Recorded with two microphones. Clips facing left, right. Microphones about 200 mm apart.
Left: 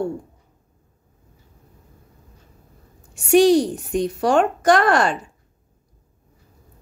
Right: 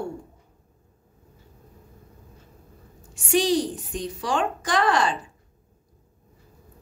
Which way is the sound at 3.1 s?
65° left (ahead or behind).